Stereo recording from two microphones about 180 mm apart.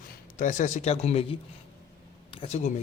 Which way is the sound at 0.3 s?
45° left (ahead or behind).